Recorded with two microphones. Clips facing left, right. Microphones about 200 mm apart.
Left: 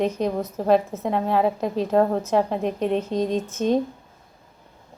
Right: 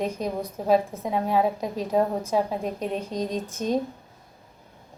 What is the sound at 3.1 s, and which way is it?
Speech, 25° left (ahead or behind).